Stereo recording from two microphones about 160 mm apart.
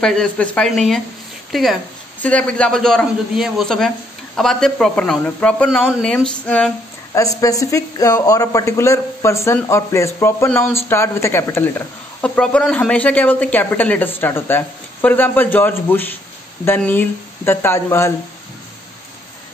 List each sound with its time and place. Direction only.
0.0 s speech: 5° left (ahead or behind)
7.2 s speech: 20° left (ahead or behind)